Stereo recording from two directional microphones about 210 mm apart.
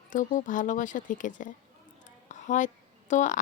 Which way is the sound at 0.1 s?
40° left (ahead or behind).